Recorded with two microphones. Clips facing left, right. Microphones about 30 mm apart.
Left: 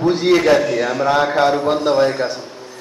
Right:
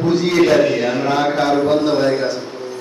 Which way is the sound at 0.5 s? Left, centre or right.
Right.